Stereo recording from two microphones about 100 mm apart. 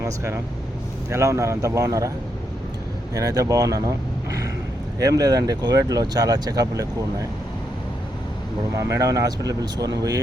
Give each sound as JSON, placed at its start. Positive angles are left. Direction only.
{"t": 0.0, "sound": "speech", "side_deg": -25}
{"t": 3.2, "sound": "speech", "side_deg": -35}
{"t": 8.7, "sound": "speech", "side_deg": -35}